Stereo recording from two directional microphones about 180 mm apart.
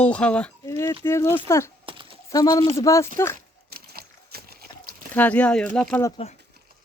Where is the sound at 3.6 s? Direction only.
60° right (ahead or behind).